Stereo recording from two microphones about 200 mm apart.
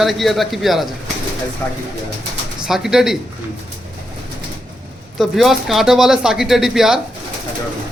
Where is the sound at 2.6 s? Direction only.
Centre (ahead or behind).